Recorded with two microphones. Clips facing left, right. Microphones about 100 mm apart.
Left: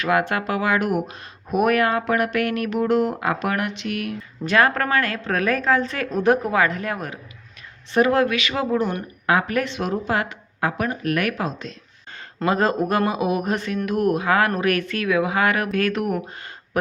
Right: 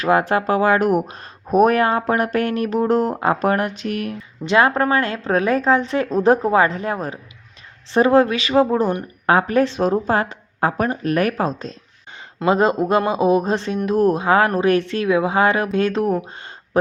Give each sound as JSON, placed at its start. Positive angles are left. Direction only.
{"t": 0.0, "sound": "speech", "side_deg": -30}
{"t": 4.4, "sound": "speech", "side_deg": -25}
{"t": 12.5, "sound": "speech", "side_deg": -20}